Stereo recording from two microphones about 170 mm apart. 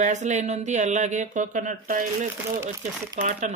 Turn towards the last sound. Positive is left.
turn(degrees=-45)  # may be behind; listen again after turning